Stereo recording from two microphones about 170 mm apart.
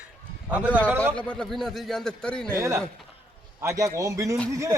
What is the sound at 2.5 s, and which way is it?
Speech, 15° right (ahead or behind).